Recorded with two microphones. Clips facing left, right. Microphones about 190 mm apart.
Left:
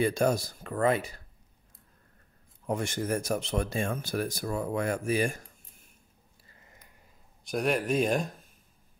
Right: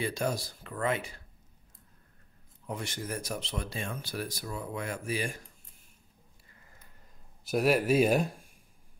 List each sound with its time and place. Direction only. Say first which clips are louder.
0.0 s speech: left 6 dB; 50° left (ahead or behind)
2.6 s speech: left 7 dB; 45° left (ahead or behind)
7.4 s speech: right 2 dB; 5° right (ahead or behind)